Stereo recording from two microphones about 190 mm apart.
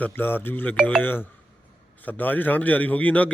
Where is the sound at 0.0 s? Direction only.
10° left (ahead or behind).